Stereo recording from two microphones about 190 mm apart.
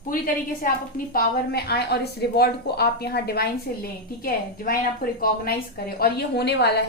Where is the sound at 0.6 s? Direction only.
50° left (ahead or behind).